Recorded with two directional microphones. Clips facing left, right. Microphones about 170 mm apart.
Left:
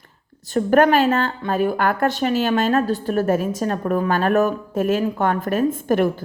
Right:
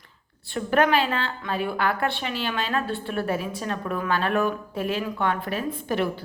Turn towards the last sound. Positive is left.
turn(degrees=50)  # may be behind; listen again after turning